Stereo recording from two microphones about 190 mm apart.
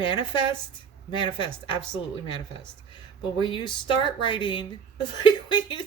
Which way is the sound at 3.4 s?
25° left (ahead or behind).